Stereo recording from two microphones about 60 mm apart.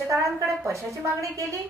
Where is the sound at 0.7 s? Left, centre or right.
Right.